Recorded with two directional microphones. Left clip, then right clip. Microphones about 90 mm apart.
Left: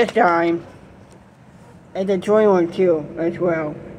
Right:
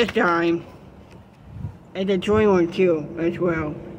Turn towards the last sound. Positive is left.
turn(degrees=-85)